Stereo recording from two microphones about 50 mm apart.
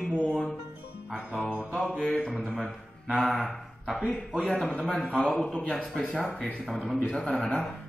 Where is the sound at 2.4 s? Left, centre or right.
Centre.